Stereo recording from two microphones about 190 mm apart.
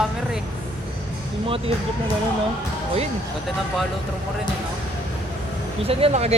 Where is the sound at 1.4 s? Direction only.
30° right (ahead or behind).